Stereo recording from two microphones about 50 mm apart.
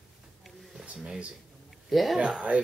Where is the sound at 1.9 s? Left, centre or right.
Centre.